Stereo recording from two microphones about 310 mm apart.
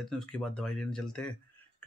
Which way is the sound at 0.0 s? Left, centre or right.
Centre.